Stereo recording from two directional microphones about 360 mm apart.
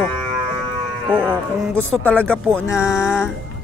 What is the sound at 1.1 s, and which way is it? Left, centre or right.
Speech, centre.